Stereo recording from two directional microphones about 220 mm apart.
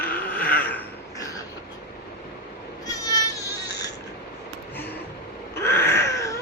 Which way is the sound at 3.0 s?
15° left (ahead or behind).